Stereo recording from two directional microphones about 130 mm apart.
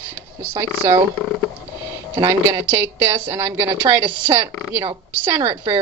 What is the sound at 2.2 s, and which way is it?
A woman's voice, 30° right (ahead or behind).